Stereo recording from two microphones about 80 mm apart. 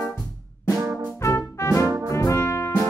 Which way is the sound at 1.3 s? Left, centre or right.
Left.